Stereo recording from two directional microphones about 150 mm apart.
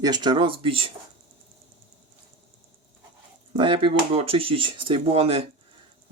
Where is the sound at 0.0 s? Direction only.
30° right (ahead or behind).